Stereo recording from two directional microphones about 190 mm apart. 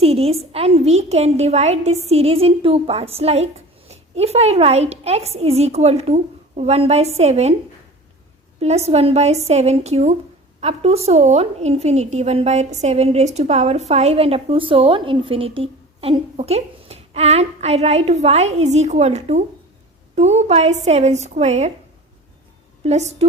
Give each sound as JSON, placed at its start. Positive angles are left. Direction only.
{"t": 0.0, "sound": "a woman's voice", "side_deg": -30}
{"t": 8.5, "sound": "a woman's voice", "side_deg": -35}
{"t": 22.8, "sound": "a woman's voice", "side_deg": -35}